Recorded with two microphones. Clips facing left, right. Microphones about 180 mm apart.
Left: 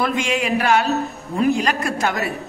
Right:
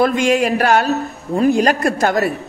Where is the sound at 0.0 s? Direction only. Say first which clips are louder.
Right 7 dB; 40° right (ahead or behind).